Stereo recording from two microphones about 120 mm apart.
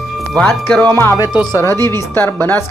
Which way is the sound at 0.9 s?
25° left (ahead or behind).